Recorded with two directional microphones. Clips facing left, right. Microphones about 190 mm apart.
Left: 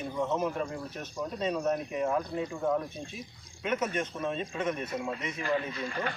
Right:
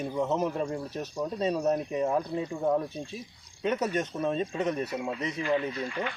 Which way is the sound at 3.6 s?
35° right (ahead or behind).